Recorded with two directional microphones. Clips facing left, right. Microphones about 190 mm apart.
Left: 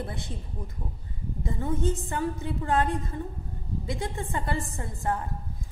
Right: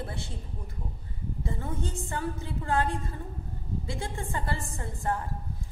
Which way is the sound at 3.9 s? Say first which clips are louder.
Left 4 dB; 20° left (ahead or behind).